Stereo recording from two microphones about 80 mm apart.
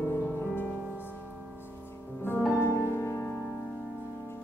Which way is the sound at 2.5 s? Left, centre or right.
Left.